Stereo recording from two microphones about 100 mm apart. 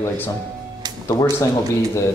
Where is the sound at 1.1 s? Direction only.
30° left (ahead or behind).